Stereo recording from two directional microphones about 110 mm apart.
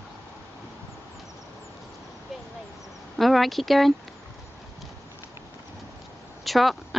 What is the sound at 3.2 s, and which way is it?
Speech, centre (ahead or behind).